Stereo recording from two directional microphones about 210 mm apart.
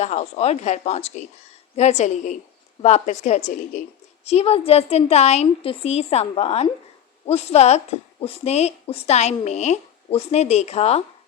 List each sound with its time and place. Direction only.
0.0 s a woman's voice: 30° left (ahead or behind)